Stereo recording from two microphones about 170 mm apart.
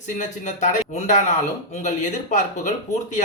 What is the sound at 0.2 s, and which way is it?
Speech, 45° left (ahead or behind).